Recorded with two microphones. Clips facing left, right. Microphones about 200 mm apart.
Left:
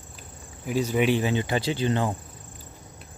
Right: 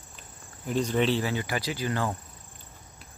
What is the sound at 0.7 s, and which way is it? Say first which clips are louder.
Speech: left 2 dB; 10° left (ahead or behind).